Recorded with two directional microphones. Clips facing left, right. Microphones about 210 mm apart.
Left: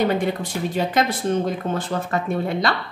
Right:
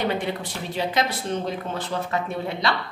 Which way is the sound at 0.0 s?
45° left (ahead or behind).